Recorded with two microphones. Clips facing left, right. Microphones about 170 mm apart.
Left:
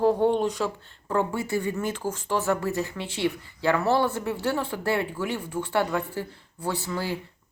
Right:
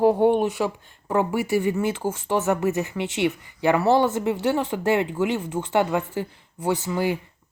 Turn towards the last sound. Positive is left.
turn(degrees=-15)  # may be behind; listen again after turning